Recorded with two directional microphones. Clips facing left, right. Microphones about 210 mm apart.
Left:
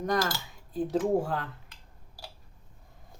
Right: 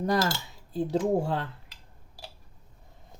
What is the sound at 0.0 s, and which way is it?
Speech, 30° right (ahead or behind).